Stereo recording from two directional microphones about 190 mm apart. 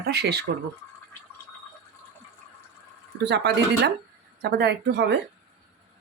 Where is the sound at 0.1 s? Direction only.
60° right (ahead or behind).